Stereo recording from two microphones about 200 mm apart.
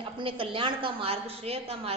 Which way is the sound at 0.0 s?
25° right (ahead or behind).